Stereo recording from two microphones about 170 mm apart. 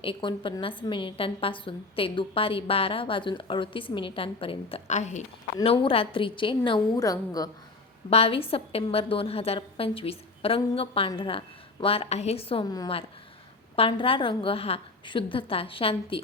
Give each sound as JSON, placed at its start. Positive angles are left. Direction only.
{"t": 0.0, "sound": "a woman's voice", "side_deg": 30}
{"t": 5.6, "sound": "a woman's voice", "side_deg": 30}
{"t": 8.1, "sound": "a woman's voice", "side_deg": 35}